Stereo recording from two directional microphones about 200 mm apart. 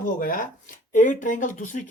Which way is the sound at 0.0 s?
45° left (ahead or behind).